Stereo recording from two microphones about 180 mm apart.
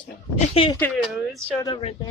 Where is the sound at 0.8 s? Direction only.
Centre (ahead or behind).